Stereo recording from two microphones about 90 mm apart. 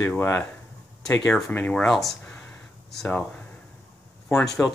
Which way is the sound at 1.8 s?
Centre (ahead or behind).